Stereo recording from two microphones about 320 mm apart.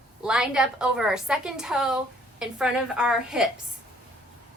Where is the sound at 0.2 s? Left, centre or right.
Centre.